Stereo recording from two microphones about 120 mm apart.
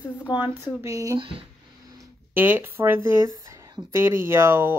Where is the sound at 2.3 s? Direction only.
15° right (ahead or behind).